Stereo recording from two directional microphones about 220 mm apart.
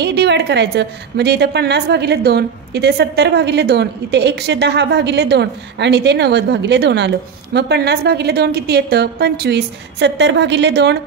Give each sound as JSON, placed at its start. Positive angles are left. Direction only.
{"t": 0.0, "sound": "a woman's voice", "side_deg": -50}